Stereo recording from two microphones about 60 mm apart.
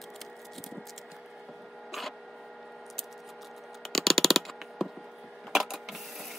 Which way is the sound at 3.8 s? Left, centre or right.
Centre.